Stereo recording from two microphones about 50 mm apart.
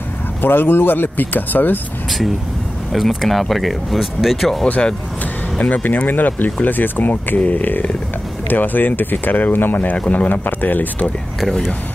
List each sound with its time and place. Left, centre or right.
0.4 s speech: left
2.9 s speech: centre
5.6 s speech: left
9.9 s speech: left
11.4 s speech: centre